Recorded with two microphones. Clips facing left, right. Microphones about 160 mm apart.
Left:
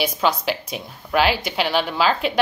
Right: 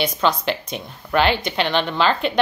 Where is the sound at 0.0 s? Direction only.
5° left (ahead or behind).